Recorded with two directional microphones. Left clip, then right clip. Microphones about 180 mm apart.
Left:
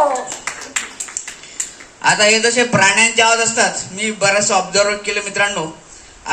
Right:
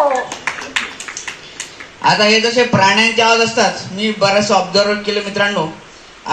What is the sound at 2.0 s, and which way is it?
A man's voice, 40° left (ahead or behind).